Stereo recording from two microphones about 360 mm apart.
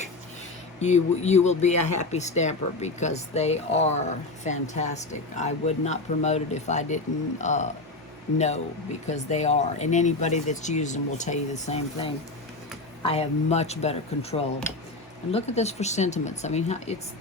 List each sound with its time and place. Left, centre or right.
0.8 s speech: centre